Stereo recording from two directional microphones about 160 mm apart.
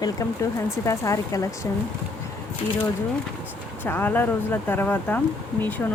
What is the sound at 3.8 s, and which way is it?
Speech, 10° left (ahead or behind).